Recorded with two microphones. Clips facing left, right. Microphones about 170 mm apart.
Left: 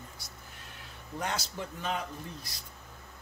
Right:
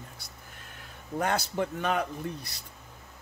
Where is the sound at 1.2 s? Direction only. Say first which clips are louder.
Right 7 dB; 55° right (ahead or behind).